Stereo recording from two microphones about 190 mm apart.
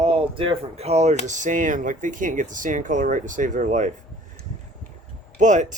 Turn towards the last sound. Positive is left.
turn(degrees=-40)  # may be behind; listen again after turning